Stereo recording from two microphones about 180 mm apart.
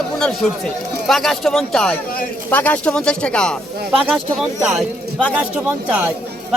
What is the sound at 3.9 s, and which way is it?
Speech, 5° right (ahead or behind).